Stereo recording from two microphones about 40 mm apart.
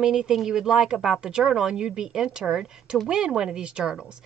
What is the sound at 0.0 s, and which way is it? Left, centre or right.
Speech, centre.